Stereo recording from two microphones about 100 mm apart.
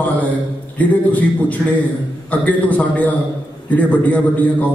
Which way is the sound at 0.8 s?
15° left (ahead or behind).